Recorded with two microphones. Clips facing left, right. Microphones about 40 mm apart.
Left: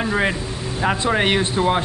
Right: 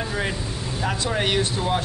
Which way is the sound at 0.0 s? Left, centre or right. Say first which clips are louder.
Left 6 dB; left.